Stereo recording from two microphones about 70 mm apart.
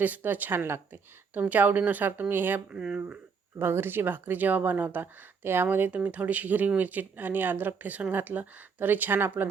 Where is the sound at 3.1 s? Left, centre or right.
Right.